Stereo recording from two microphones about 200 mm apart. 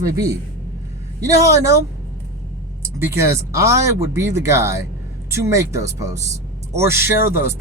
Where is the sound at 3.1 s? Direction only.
15° right (ahead or behind).